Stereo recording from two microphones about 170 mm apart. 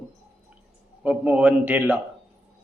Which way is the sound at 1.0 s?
5° right (ahead or behind).